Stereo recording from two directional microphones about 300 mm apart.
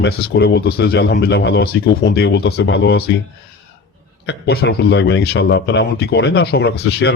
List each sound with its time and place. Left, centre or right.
0.0 s speech: left
4.3 s speech: left